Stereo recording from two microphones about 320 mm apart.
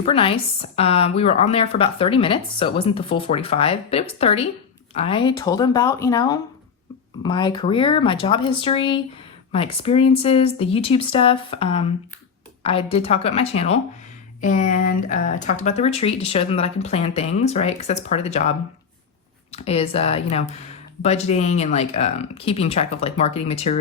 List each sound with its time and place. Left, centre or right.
0.0 s speech: centre